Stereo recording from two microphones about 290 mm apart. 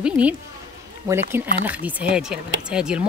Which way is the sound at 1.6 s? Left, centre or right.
Centre.